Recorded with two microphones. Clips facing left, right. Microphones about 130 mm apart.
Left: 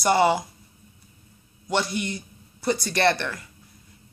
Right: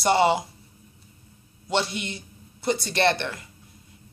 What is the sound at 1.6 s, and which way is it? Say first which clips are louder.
A man's voice: left 1 dB; 25° right (ahead or behind).